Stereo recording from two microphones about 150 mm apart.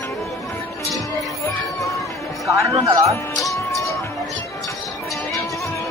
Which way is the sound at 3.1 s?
20° left (ahead or behind).